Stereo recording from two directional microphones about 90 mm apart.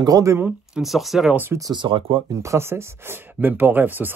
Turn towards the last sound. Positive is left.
turn(degrees=-20)  # may be behind; listen again after turning